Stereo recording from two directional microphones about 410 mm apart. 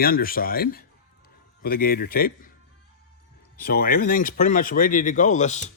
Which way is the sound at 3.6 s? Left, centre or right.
Left.